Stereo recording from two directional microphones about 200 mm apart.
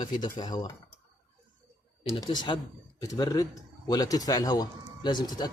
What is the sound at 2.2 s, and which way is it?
Speech, 20° left (ahead or behind).